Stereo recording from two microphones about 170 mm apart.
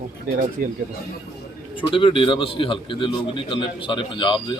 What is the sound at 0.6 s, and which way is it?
Speech, 60° right (ahead or behind).